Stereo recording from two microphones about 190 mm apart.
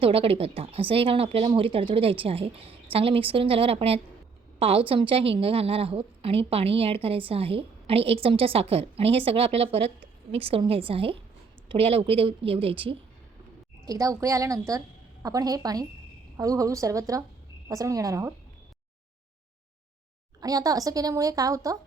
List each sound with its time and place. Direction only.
0.0 s a woman's voice: 30° right (ahead or behind)
13.8 s a woman's voice: 20° right (ahead or behind)
20.4 s a woman's voice: 20° right (ahead or behind)